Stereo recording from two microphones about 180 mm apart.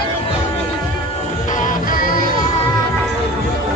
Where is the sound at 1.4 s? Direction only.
45° left (ahead or behind).